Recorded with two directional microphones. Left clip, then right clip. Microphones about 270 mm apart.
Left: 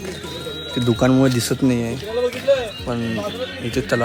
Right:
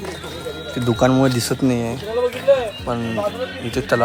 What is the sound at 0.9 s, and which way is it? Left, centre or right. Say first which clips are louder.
Speech: right 1 dB; centre.